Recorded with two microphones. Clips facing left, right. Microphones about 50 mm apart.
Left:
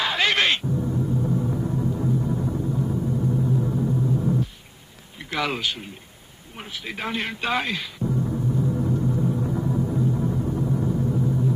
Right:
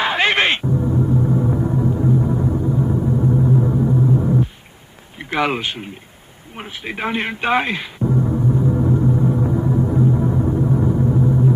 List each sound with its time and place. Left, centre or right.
0.0 s gong: right
5.2 s speech: right
6.5 s a sound: right